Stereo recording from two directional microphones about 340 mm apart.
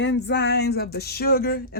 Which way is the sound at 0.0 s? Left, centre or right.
Left.